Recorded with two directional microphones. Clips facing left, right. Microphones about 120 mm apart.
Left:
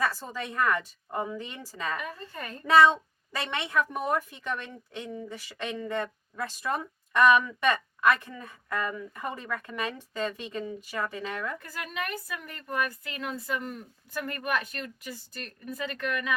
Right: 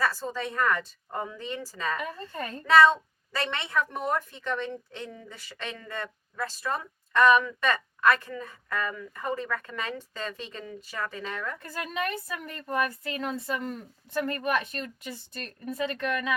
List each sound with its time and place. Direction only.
0.4 s a woman's voice: 15° left (ahead or behind)
2.3 s speech: 30° right (ahead or behind)
2.7 s a woman's voice: 15° left (ahead or behind)
11.6 s speech: 30° right (ahead or behind)